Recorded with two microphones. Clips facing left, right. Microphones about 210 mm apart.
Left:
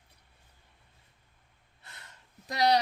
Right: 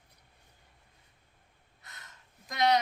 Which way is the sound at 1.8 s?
30° left (ahead or behind).